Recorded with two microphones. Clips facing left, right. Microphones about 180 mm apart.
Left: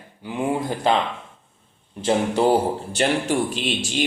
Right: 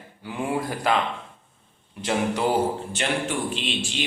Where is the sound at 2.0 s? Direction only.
30° left (ahead or behind).